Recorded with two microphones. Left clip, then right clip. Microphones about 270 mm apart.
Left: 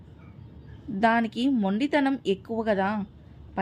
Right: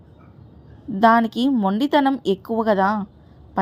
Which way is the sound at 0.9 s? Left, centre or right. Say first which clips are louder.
Right 8 dB; centre.